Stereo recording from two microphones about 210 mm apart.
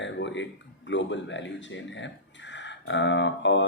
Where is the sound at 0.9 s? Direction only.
60° left (ahead or behind).